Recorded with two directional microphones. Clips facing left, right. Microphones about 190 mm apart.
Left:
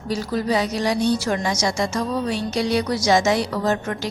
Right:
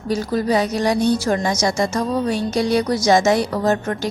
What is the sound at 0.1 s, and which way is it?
Speech, 45° right (ahead or behind).